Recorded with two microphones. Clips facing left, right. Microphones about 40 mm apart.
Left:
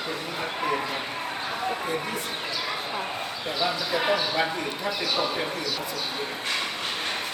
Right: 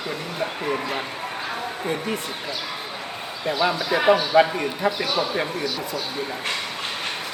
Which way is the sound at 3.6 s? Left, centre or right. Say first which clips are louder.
Right 6 dB; right.